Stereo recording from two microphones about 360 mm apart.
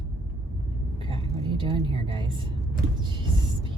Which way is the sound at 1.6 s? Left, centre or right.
Centre.